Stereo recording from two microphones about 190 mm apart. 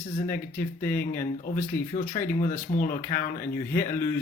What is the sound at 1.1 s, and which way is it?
Speech, 50° left (ahead or behind).